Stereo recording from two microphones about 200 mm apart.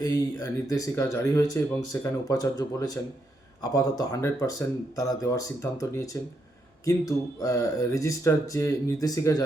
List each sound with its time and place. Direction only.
0.0 s speech: 20° left (ahead or behind)